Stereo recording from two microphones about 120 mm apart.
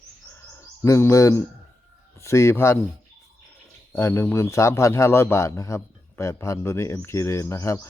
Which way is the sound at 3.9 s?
20° left (ahead or behind).